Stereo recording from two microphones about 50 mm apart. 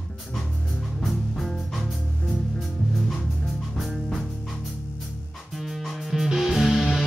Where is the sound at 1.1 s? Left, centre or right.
Centre.